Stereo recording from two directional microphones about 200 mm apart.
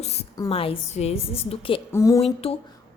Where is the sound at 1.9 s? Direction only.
15° left (ahead or behind).